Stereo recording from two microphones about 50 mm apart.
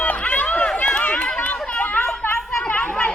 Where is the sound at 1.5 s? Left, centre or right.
Left.